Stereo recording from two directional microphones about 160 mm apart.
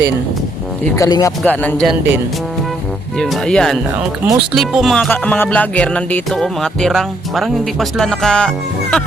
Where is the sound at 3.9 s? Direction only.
15° right (ahead or behind).